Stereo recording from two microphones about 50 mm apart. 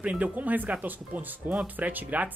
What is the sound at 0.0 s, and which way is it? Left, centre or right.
A woman's voice, right.